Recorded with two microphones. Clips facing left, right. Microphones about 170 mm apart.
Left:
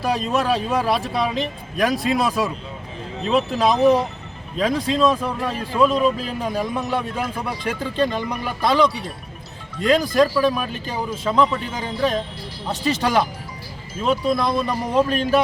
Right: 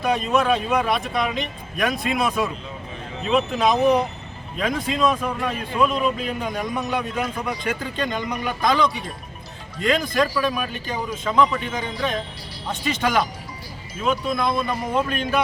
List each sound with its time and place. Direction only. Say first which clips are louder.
0.0 s speech: right 1 dB; 35° left (ahead or behind)
6.6 s a man's voice: left 2 dB; centre (ahead or behind)
7.6 s speech: left 8 dB; 30° left (ahead or behind)